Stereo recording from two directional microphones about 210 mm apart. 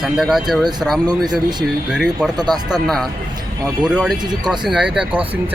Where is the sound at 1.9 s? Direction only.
5° right (ahead or behind).